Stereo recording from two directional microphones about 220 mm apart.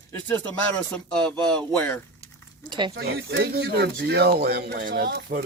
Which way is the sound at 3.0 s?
45° right (ahead or behind).